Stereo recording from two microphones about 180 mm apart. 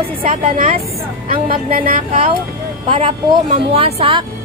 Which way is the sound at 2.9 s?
30° right (ahead or behind).